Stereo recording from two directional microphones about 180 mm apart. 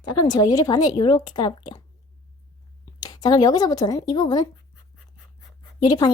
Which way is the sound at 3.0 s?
20° left (ahead or behind).